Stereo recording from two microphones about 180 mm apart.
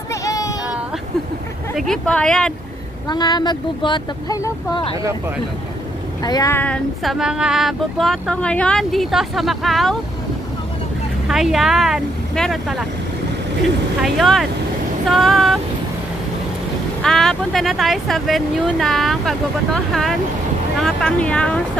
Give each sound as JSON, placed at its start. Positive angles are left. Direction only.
{"t": 0.1, "sound": "child singing", "side_deg": 20}
{"t": 1.8, "sound": "speech", "side_deg": 5}
{"t": 3.1, "sound": "speech", "side_deg": 25}
{"t": 6.2, "sound": "speech", "side_deg": 20}
{"t": 6.6, "sound": "speech", "side_deg": 5}
{"t": 11.2, "sound": "speech", "side_deg": 0}
{"t": 14.0, "sound": "speech", "side_deg": 0}
{"t": 17.0, "sound": "speech", "side_deg": 0}